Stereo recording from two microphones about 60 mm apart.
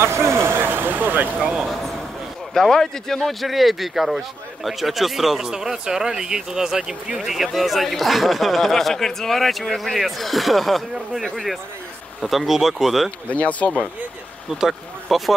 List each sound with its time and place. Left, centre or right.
0.0 s speech: right
1.4 s speech: centre
2.5 s speech: centre
13.3 s speech: left
14.6 s speech: centre